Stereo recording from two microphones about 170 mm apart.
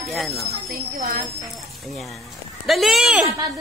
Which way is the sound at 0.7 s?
55° right (ahead or behind).